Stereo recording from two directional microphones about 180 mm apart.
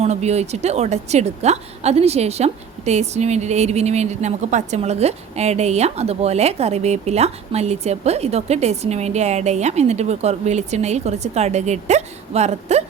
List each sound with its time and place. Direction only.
0.0 s a woman's voice: 35° right (ahead or behind)